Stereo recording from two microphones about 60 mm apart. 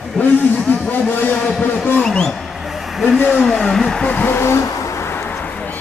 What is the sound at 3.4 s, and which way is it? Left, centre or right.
Speech, centre.